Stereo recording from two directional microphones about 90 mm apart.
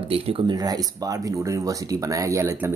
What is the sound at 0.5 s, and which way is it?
Speech, 45° right (ahead or behind).